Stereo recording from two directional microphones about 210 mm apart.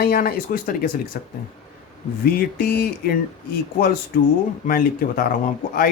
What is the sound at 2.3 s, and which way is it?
Speech, 50° left (ahead or behind).